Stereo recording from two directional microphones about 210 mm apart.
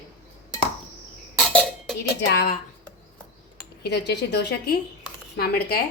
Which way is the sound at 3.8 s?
55° left (ahead or behind).